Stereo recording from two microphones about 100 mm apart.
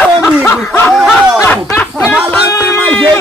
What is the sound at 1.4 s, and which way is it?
Speech, 20° left (ahead or behind).